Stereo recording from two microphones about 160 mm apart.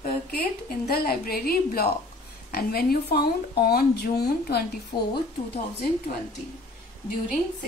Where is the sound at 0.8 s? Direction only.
70° left (ahead or behind).